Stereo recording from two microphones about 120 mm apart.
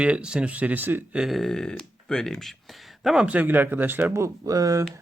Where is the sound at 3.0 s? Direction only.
10° right (ahead or behind).